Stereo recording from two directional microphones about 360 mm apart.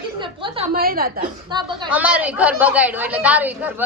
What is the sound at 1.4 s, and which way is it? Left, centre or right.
A woman's voice, centre.